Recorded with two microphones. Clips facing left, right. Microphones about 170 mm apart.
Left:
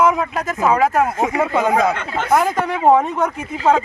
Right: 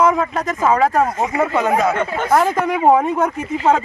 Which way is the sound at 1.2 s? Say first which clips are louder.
Even; 15° left (ahead or behind).